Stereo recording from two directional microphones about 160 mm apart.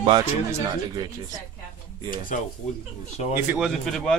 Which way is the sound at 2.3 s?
55° left (ahead or behind).